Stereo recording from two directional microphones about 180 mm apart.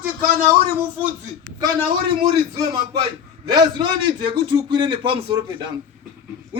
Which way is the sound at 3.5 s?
25° right (ahead or behind).